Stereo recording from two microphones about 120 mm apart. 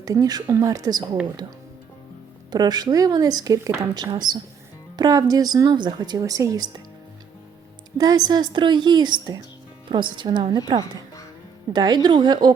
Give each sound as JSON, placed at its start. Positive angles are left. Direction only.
{"t": 0.0, "sound": "a woman's voice", "side_deg": -30}
{"t": 2.5, "sound": "a woman's voice", "side_deg": -35}
{"t": 7.9, "sound": "a woman's voice", "side_deg": -35}
{"t": 11.7, "sound": "a woman's voice", "side_deg": -35}